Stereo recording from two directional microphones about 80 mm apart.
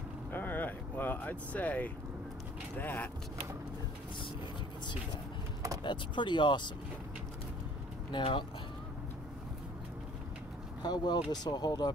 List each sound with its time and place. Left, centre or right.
0.3 s speech: left
5.9 s speech: left
8.1 s speech: left
10.8 s speech: left